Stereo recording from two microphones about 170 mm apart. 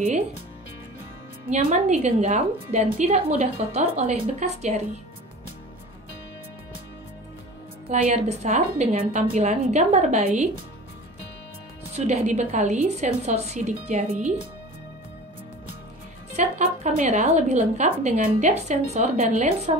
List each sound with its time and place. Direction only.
1.5 s a woman's voice: 50° right (ahead or behind)
7.9 s a woman's voice: 40° right (ahead or behind)
11.9 s a woman's voice: 40° right (ahead or behind)
16.3 s a woman's voice: 45° right (ahead or behind)